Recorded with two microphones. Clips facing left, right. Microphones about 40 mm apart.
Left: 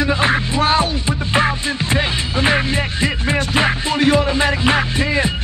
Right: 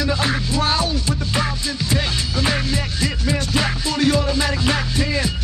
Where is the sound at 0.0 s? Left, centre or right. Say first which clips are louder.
Left 5 dB; left.